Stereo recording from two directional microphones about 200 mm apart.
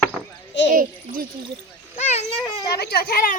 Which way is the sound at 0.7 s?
45° right (ahead or behind).